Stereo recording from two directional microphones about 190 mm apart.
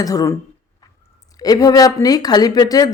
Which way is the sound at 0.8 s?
20° left (ahead or behind).